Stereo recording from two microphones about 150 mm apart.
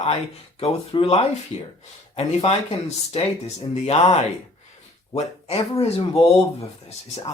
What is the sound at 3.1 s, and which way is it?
Speech, 45° left (ahead or behind).